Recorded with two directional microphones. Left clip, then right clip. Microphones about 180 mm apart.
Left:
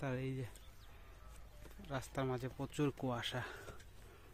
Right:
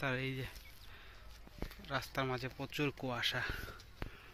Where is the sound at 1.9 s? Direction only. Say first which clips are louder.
Right 3 dB; 15° left (ahead or behind).